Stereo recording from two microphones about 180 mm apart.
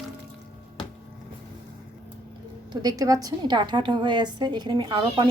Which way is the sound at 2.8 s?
20° right (ahead or behind).